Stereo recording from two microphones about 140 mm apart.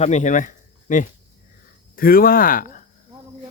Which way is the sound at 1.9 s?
90° left.